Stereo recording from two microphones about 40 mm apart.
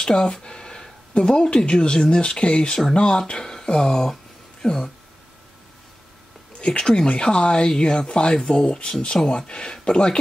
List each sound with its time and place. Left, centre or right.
0.0 s speech: centre
6.6 s speech: left